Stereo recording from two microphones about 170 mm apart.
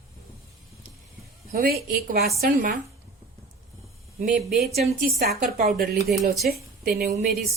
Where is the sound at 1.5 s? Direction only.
60° right (ahead or behind).